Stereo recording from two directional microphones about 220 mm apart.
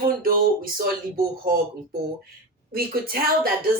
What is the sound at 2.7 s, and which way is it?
Speech, 40° right (ahead or behind).